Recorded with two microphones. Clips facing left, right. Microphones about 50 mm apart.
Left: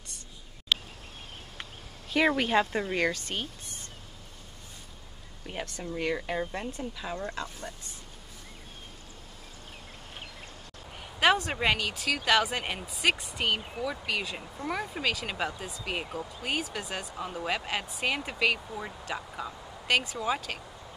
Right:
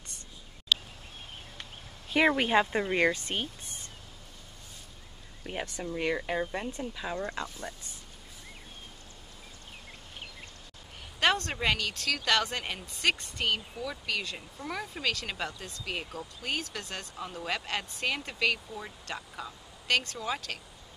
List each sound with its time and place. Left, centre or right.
2.0 s speech: centre
5.5 s speech: centre
11.1 s speech: centre